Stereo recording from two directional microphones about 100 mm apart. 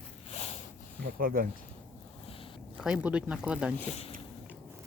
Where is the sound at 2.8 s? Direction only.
10° right (ahead or behind).